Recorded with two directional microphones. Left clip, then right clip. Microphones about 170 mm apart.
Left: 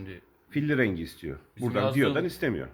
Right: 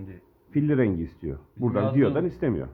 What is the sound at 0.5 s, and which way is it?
Speech, centre (ahead or behind).